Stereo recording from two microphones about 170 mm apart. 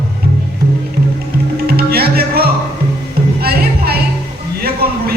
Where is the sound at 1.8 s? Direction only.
65° right (ahead or behind).